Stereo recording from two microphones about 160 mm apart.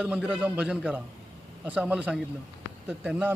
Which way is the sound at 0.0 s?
5° right (ahead or behind).